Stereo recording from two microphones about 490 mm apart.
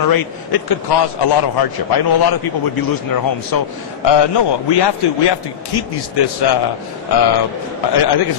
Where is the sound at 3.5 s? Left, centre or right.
Left.